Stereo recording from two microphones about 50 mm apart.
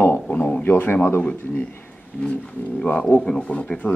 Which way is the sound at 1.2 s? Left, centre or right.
Left.